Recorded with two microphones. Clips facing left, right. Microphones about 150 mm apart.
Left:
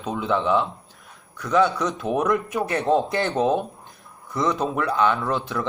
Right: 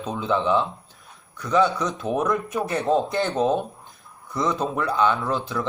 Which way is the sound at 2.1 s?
15° left (ahead or behind).